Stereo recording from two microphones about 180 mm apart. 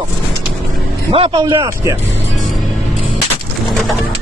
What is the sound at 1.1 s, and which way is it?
Speech, 30° right (ahead or behind).